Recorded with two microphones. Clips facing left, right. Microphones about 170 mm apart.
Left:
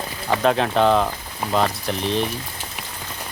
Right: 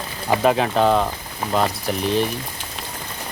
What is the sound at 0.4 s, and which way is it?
Speech, 5° right (ahead or behind).